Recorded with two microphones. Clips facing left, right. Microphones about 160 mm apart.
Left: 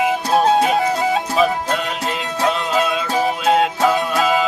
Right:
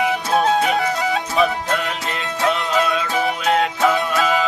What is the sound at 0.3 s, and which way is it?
Music, 25° left (ahead or behind).